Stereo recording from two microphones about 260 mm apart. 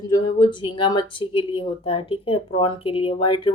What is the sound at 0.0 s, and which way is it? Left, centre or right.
Speech, centre.